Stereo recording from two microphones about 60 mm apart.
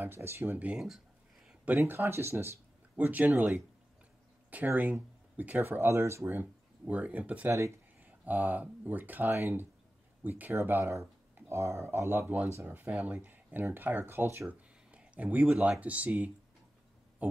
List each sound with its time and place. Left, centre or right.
0.0 s speech: right
0.7 s a sound: centre
1.9 s speech: right
3.0 s speech: right
6.3 s speech: right
12.1 s speech: right
14.5 s a sound: right
15.8 s speech: right
17.2 s a sound: right